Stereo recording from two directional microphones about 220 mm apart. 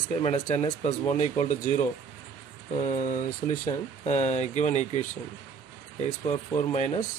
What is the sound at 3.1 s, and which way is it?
Speech, 15° left (ahead or behind).